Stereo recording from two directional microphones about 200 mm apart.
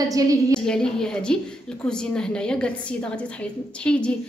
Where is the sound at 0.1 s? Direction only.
15° right (ahead or behind).